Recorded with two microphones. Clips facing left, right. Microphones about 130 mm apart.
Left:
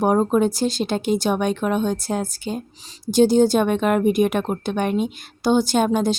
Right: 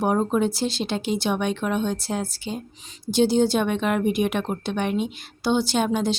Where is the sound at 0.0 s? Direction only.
45° left (ahead or behind).